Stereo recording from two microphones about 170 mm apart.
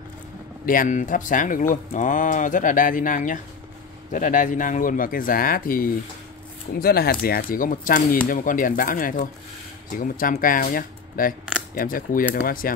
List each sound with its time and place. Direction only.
0.7 s speech: 50° left (ahead or behind)